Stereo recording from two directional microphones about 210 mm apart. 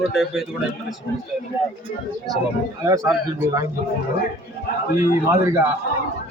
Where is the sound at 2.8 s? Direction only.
15° right (ahead or behind).